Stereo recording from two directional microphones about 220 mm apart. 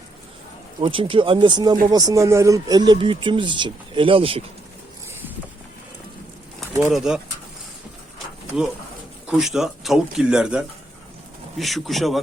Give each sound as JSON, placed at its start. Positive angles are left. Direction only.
{"t": 0.8, "sound": "speech", "side_deg": -25}
{"t": 6.9, "sound": "speech", "side_deg": 0}
{"t": 9.2, "sound": "speech", "side_deg": -5}